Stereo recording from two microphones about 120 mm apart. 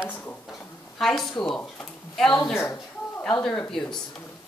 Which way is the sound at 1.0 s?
5° left (ahead or behind).